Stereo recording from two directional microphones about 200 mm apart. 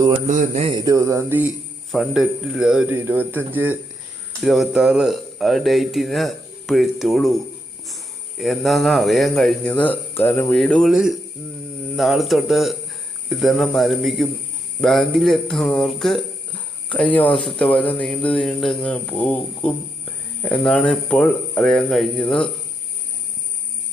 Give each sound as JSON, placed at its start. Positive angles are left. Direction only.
{"t": 0.3, "sound": "a man's voice", "side_deg": -35}
{"t": 8.4, "sound": "speech", "side_deg": 0}